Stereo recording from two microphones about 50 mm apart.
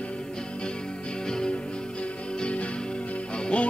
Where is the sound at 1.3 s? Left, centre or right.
Centre.